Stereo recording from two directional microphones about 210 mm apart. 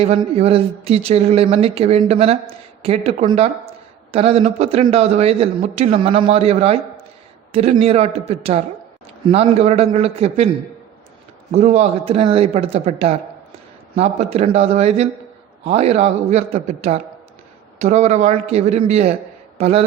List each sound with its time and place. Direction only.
0.0 s a man's voice: 30° right (ahead or behind)
11.5 s a man's voice: 35° right (ahead or behind)